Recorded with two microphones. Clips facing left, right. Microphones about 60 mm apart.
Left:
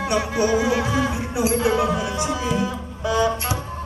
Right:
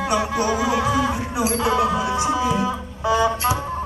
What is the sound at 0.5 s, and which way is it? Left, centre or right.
Music, left.